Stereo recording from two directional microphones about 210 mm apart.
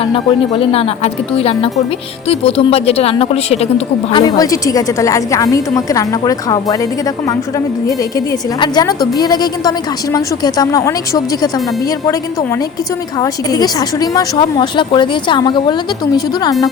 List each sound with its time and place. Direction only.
0.0 s a woman's voice: 25° left (ahead or behind)
4.2 s a woman's voice: 15° left (ahead or behind)
7.9 s a woman's voice: 15° left (ahead or behind)
13.1 s a woman's voice: 20° left (ahead or behind)